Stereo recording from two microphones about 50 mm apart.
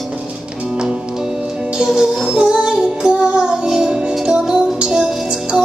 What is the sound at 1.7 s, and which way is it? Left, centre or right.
Music, centre.